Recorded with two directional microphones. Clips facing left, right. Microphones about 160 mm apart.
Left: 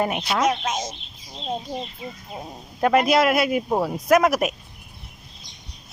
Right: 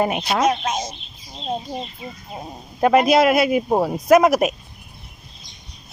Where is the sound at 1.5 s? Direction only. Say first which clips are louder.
Right 2 dB; 5° right (ahead or behind).